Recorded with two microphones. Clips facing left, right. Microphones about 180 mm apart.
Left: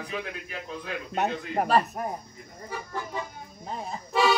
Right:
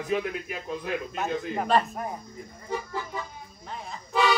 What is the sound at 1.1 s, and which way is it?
Speech, 65° left (ahead or behind).